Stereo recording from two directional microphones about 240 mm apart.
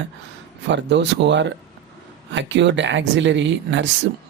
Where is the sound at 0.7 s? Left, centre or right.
Right.